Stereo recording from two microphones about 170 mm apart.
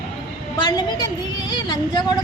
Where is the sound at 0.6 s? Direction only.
25° left (ahead or behind).